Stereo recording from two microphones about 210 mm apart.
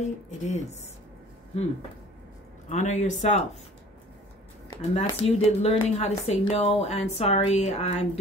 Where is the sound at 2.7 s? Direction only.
35° left (ahead or behind).